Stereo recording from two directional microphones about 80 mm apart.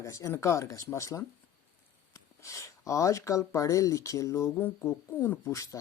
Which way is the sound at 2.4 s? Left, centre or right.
Left.